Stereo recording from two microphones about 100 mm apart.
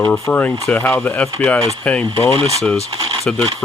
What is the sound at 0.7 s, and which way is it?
Speech, 5° left (ahead or behind).